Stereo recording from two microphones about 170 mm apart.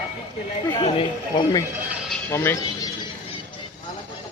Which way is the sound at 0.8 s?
30° left (ahead or behind).